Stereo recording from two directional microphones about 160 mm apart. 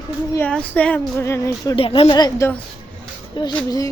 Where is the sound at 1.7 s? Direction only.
35° left (ahead or behind).